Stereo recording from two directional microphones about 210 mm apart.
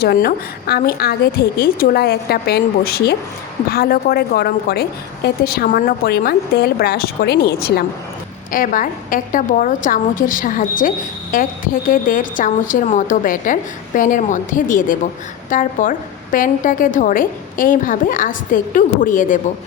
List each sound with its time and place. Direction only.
0.0 s a woman's voice: 45° left (ahead or behind)